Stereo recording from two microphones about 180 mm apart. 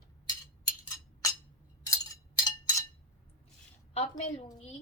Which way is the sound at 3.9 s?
35° left (ahead or behind).